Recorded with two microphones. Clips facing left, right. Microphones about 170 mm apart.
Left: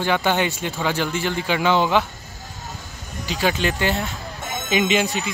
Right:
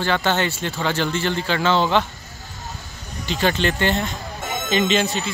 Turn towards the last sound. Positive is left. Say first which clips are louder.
# even
turn(degrees=15)  # may be behind; listen again after turning